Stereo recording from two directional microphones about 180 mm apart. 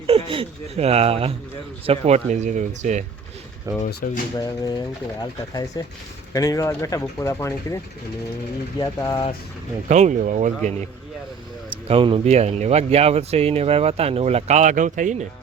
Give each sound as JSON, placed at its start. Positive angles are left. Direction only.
{"t": 0.1, "sound": "speech", "side_deg": -30}
{"t": 3.8, "sound": "speech", "side_deg": 50}
{"t": 4.4, "sound": "speech", "side_deg": 20}
{"t": 8.8, "sound": "speech", "side_deg": 25}
{"t": 9.9, "sound": "speech", "side_deg": -40}
{"t": 11.9, "sound": "speech", "side_deg": -30}